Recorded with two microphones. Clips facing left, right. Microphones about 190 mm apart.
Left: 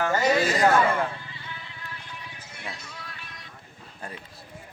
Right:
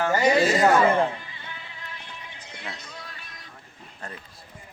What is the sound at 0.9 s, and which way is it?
Music, 20° right (ahead or behind).